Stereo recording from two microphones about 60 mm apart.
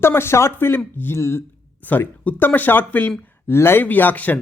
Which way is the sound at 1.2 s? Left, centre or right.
Left.